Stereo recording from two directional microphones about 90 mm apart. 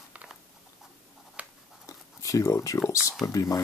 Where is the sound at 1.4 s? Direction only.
15° right (ahead or behind).